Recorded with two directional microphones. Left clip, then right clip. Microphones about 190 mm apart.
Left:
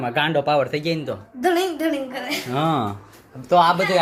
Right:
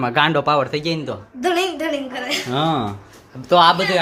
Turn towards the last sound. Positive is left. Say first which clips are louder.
# right 3 dB
turn(degrees=-10)  # may be behind; listen again after turning